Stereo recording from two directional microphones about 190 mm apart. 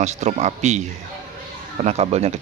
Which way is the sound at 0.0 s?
35° right (ahead or behind).